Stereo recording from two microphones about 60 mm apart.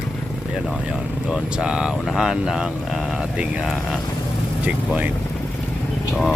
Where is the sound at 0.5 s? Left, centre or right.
Centre.